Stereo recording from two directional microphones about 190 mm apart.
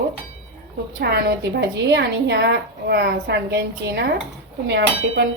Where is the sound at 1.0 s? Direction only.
60° right (ahead or behind).